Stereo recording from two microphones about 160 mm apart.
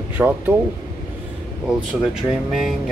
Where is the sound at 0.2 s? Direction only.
10° right (ahead or behind).